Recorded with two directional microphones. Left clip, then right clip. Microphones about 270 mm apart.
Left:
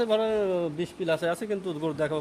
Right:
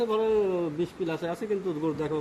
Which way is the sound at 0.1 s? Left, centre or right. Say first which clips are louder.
Even; left.